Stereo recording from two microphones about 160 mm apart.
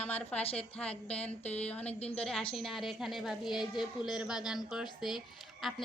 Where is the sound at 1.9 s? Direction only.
40° left (ahead or behind).